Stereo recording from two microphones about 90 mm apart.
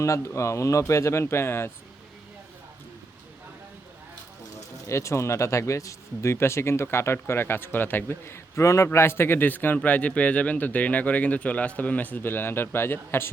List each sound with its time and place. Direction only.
0.0 s speech: 35° left (ahead or behind)
4.9 s speech: 35° left (ahead or behind)